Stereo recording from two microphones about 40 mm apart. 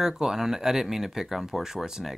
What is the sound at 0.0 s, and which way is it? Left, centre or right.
Speech, centre.